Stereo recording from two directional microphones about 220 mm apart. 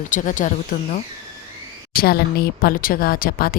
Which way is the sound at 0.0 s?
35° left (ahead or behind).